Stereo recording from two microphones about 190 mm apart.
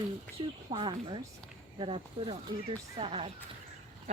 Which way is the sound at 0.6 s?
30° right (ahead or behind).